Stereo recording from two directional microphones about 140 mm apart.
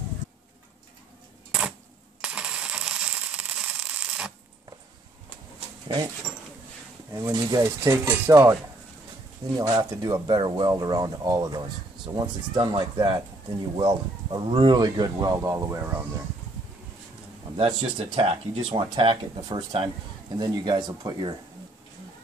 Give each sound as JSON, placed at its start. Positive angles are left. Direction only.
{"t": 2.2, "sound": "a sound", "side_deg": -5}
{"t": 7.2, "sound": "speech", "side_deg": -20}
{"t": 9.6, "sound": "speech", "side_deg": -25}
{"t": 17.6, "sound": "speech", "side_deg": -40}